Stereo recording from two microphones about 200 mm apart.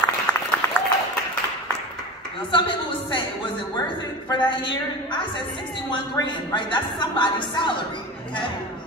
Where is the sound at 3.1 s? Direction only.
20° left (ahead or behind).